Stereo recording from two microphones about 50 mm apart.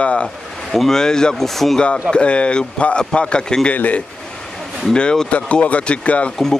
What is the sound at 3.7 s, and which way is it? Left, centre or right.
Speech, left.